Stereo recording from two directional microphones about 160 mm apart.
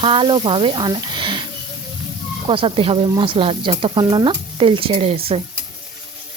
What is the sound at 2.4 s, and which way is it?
Speech, 35° right (ahead or behind).